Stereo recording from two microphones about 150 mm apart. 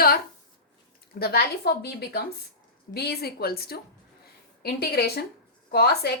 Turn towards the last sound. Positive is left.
turn(degrees=90)